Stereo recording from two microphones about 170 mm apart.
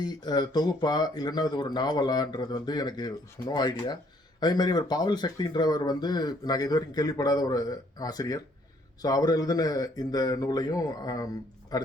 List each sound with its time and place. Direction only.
0.0 s speech: 25° left (ahead or behind)